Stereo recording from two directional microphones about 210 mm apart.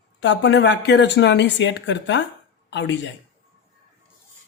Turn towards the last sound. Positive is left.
turn(degrees=60)  # may be behind; listen again after turning